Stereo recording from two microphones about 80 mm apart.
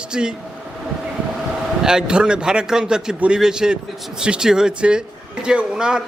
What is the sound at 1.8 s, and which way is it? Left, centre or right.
A man's voice, centre.